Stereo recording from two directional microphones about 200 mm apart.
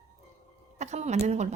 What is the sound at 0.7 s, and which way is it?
Speech, 35° right (ahead or behind).